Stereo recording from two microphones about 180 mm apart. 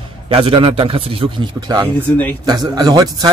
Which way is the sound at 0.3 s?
30° right (ahead or behind).